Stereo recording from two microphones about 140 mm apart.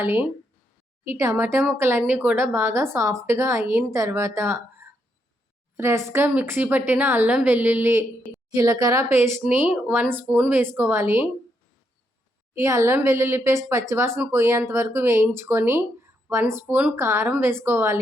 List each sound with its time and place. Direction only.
0.0 s a woman's voice: 15° right (ahead or behind)
8.5 s a woman's voice: 25° right (ahead or behind)
12.5 s a woman's voice: 20° right (ahead or behind)